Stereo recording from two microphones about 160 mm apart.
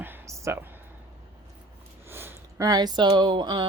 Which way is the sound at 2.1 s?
15° right (ahead or behind).